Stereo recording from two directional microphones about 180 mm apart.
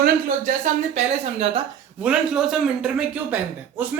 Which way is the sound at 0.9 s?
35° right (ahead or behind).